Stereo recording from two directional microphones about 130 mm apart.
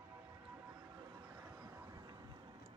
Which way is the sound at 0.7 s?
30° right (ahead or behind).